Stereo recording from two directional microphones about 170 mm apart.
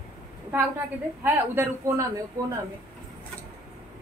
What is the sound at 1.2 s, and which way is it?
Speech, 15° right (ahead or behind).